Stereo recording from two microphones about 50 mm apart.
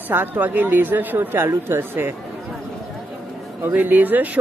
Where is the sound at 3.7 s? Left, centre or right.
Right.